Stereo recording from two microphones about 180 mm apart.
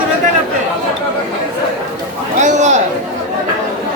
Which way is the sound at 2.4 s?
40° right (ahead or behind).